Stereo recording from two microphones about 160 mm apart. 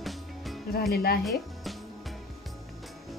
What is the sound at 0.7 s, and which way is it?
Speech, 70° left (ahead or behind).